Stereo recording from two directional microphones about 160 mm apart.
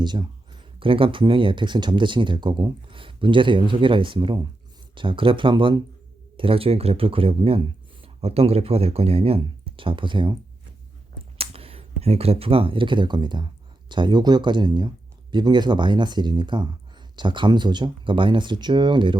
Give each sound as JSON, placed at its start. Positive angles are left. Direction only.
{"t": 0.0, "sound": "speech", "side_deg": -30}
{"t": 11.3, "sound": "speech", "side_deg": -35}